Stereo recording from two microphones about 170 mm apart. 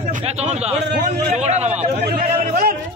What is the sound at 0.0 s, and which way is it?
A man's voice, 45° right (ahead or behind).